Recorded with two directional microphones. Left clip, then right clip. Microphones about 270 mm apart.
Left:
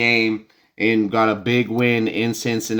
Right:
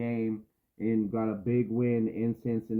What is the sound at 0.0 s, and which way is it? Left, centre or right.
Speech, centre.